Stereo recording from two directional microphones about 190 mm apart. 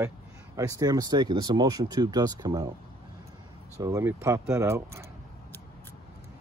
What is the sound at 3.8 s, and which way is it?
Speech, 15° right (ahead or behind).